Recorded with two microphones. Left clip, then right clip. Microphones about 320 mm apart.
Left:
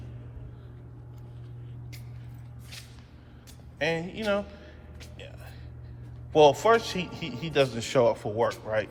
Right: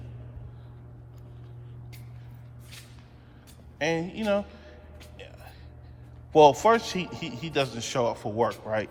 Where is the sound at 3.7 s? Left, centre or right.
Centre.